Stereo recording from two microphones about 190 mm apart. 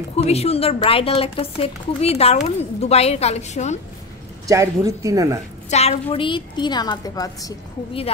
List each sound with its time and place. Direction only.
0.1 s a woman's voice: 35° left (ahead or behind)
4.5 s a woman's voice: 15° right (ahead or behind)
5.7 s a woman's voice: 35° left (ahead or behind)